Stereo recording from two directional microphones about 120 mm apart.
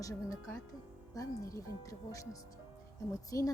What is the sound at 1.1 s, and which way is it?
Speech, 30° left (ahead or behind).